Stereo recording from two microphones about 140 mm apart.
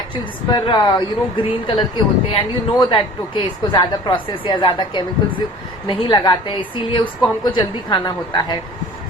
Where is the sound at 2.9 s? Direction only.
35° left (ahead or behind).